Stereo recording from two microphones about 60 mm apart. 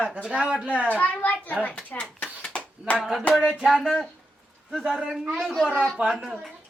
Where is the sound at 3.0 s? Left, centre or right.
Centre.